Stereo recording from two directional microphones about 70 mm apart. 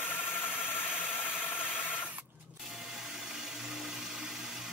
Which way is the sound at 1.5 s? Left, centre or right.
Left.